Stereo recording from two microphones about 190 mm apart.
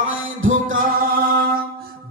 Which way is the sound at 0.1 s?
90° right.